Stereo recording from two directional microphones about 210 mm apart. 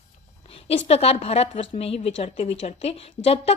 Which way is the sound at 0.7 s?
30° left (ahead or behind).